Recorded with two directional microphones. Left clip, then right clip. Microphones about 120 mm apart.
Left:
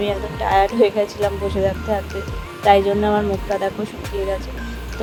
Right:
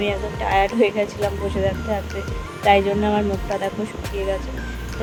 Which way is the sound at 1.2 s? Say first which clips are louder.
Left 4 dB; centre (ahead or behind).